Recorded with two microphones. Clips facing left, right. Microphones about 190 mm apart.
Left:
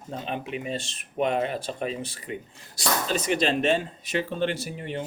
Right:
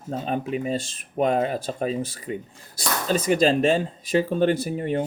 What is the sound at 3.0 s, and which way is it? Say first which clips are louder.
Speech: right 7 dB; 35° right (ahead or behind).